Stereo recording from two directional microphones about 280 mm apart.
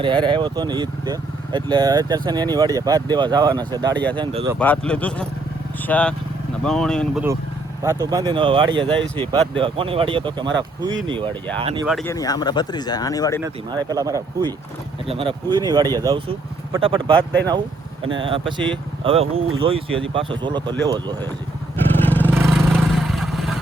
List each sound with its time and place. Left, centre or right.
0.0 s speech: centre
4.5 s speech: centre
7.8 s speech: centre
11.9 s speech: centre
12.1 s speech: centre
13.4 s speech: centre
18.2 s speech: centre
21.9 s vehicle: centre
22.3 s vehicle: centre